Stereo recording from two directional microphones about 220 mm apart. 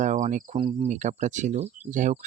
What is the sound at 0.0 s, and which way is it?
Cricket, 35° right (ahead or behind).